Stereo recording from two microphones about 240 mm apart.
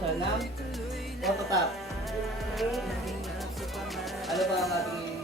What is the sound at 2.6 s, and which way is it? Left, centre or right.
Music, centre.